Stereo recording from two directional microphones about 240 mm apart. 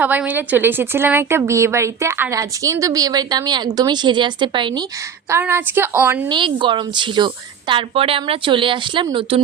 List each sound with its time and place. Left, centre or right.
0.0 s a woman's voice: centre
6.2 s a woman's voice: centre